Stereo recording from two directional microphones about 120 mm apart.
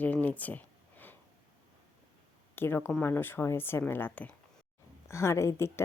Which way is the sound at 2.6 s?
20° left (ahead or behind).